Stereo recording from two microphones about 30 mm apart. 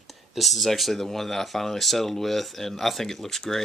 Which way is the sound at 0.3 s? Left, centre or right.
Centre.